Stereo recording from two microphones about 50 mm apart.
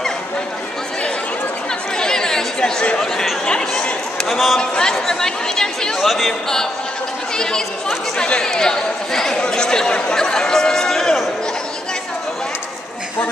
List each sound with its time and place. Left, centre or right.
2.0 s chatter: centre
4.3 s speech: centre
4.6 s speech: centre
5.9 s speech: centre
8.2 s speech: centre